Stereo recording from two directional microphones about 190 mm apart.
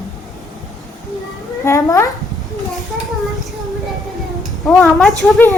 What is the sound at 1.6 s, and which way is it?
Speech, 15° left (ahead or behind).